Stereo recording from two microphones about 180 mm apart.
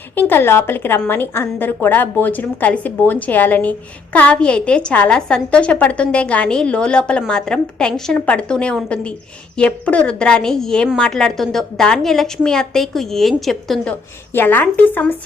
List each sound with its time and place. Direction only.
0.2 s a woman's voice: 10° left (ahead or behind)